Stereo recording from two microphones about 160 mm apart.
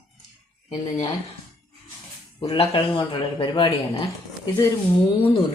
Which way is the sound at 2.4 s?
35° left (ahead or behind).